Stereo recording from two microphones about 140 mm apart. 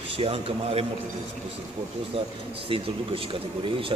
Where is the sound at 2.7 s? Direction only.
40° right (ahead or behind).